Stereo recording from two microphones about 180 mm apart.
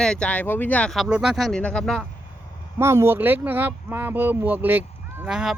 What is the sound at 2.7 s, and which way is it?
A woman's voice, 15° right (ahead or behind).